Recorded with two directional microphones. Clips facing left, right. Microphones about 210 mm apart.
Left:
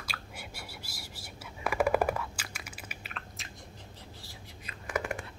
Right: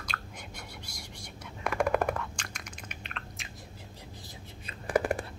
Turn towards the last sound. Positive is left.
turn(degrees=-35)  # may be behind; listen again after turning